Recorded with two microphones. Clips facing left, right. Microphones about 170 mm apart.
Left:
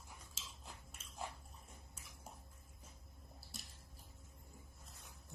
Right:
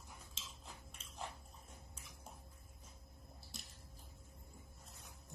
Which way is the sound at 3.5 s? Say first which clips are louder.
Even; centre (ahead or behind).